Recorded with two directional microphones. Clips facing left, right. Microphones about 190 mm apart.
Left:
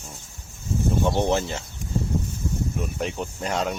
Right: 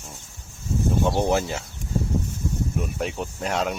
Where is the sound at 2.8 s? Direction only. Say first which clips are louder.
Even; centre (ahead or behind).